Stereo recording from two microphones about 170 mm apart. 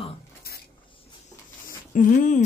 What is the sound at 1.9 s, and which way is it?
Speech, 50° left (ahead or behind).